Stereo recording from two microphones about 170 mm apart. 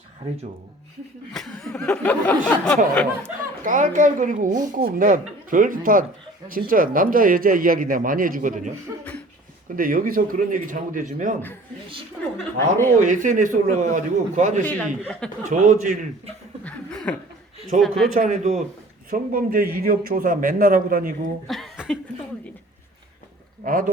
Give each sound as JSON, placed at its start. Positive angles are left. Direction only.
{"t": 1.3, "sound": "speech", "side_deg": 5}
{"t": 3.6, "sound": "a woman's voice", "side_deg": -50}
{"t": 9.7, "sound": "a woman's voice", "side_deg": -55}
{"t": 13.0, "sound": "a woman's voice", "side_deg": -50}
{"t": 14.6, "sound": "a man's voice", "side_deg": 10}
{"t": 15.4, "sound": "a woman's voice", "side_deg": -45}
{"t": 16.6, "sound": "chuckle", "side_deg": 5}
{"t": 17.7, "sound": "speech", "side_deg": 0}
{"t": 18.1, "sound": "a woman's voice", "side_deg": -45}
{"t": 19.1, "sound": "speech", "side_deg": -55}
{"t": 21.4, "sound": "a sound", "side_deg": 0}
{"t": 23.6, "sound": "speech", "side_deg": -55}